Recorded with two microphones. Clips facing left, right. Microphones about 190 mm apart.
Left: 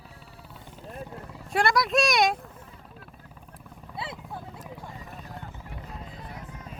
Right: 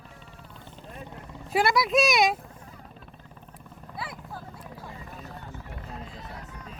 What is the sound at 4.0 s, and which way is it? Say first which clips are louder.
Clip-clop: left 1 dB; 25° left (ahead or behind).